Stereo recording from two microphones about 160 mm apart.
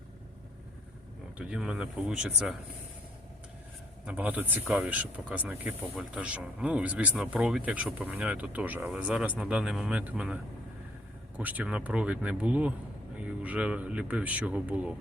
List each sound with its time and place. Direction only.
1.4 s speech: 5° right (ahead or behind)
4.0 s speech: 10° right (ahead or behind)
11.3 s speech: 10° right (ahead or behind)